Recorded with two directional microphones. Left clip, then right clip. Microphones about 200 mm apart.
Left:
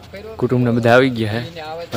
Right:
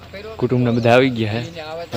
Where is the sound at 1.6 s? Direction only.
40° left (ahead or behind).